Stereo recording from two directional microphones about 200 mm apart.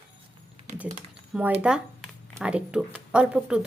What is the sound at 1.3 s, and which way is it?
Speech, 5° right (ahead or behind).